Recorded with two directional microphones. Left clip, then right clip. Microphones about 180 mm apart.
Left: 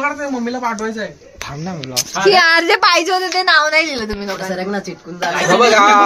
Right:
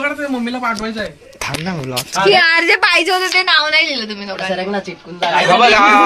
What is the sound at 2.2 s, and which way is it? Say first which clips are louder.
Speech: even; 60° left (ahead or behind).